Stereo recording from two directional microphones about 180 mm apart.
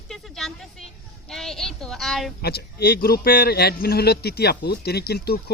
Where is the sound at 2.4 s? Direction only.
60° left (ahead or behind).